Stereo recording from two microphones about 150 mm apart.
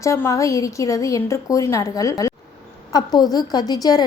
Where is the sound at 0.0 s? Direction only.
20° left (ahead or behind).